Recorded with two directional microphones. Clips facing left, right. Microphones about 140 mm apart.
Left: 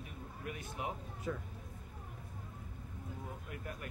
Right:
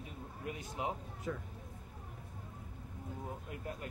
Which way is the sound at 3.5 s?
25° right (ahead or behind).